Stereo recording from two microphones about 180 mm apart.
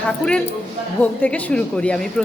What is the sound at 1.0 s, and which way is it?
A woman's voice, 10° left (ahead or behind).